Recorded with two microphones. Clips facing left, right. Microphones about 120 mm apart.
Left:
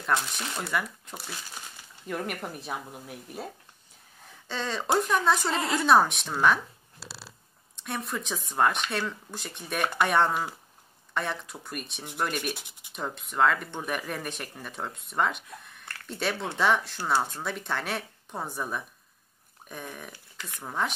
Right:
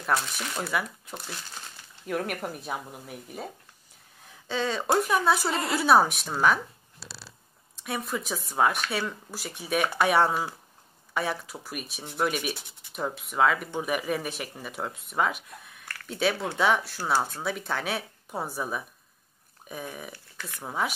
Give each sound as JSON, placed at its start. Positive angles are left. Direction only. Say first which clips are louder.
{"t": 0.0, "sound": "speech", "louder": "right 1 dB", "side_deg": -5}
{"t": 4.5, "sound": "speech", "louder": "right 2 dB", "side_deg": -5}
{"t": 7.8, "sound": "speech", "louder": "right 2 dB", "side_deg": 0}
{"t": 12.5, "sound": "speech", "louder": "even", "side_deg": 15}
{"t": 12.9, "sound": "speech", "louder": "right 2 dB", "side_deg": -5}